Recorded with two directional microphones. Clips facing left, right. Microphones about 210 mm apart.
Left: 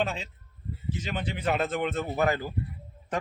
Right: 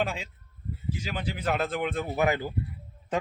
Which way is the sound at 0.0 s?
5° right (ahead or behind).